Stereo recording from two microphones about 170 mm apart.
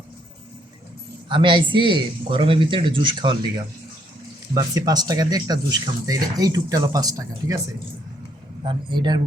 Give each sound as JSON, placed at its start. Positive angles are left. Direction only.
{"t": 1.3, "sound": "speech", "side_deg": -30}
{"t": 4.5, "sound": "speech", "side_deg": -20}
{"t": 8.6, "sound": "speech", "side_deg": -25}